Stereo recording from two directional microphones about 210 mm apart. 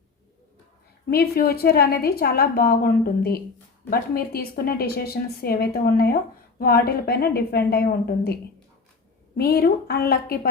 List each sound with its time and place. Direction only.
1.1 s a woman's voice: 45° left (ahead or behind)
9.4 s a woman's voice: 45° left (ahead or behind)